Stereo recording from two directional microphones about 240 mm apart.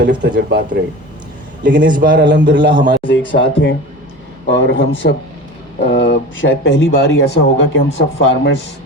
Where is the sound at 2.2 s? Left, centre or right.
Right.